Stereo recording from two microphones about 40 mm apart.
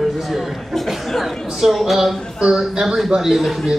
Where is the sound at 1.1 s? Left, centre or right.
Centre.